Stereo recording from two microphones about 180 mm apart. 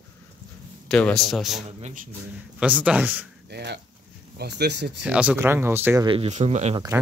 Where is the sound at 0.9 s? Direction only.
5° left (ahead or behind).